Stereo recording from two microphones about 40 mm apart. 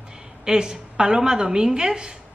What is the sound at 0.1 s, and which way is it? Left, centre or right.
A woman's voice, centre.